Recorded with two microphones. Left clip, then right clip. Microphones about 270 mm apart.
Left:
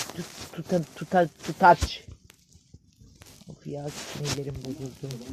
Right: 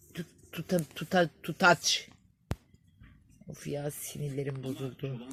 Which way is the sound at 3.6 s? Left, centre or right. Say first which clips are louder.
Even; right.